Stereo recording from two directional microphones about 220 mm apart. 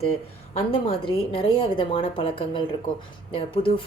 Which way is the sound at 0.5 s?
25° left (ahead or behind).